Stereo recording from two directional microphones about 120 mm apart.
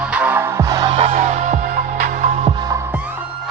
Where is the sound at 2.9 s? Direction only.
15° right (ahead or behind).